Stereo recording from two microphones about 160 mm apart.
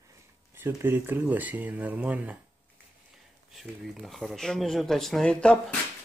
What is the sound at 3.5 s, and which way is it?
Speech, centre (ahead or behind).